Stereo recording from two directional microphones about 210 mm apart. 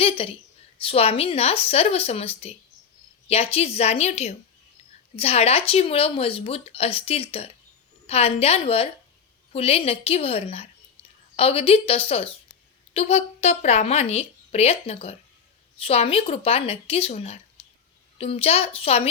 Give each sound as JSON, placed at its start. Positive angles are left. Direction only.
{"t": 0.0, "sound": "a woman's voice", "side_deg": 25}